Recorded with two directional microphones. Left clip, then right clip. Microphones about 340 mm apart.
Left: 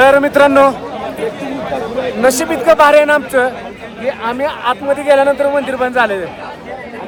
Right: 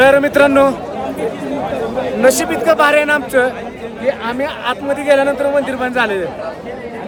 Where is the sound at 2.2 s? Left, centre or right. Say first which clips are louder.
Even; centre.